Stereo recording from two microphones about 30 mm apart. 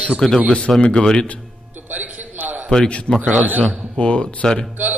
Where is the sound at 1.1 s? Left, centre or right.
Left.